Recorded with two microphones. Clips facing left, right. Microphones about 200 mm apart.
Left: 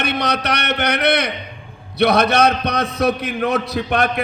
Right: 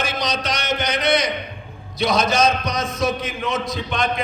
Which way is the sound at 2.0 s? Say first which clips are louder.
Left 4 dB; 65° left (ahead or behind).